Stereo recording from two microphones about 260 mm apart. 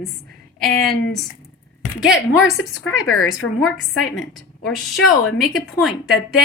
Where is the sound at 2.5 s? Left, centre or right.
Left.